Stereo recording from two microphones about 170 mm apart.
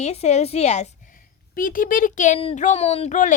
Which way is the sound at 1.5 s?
55° left (ahead or behind).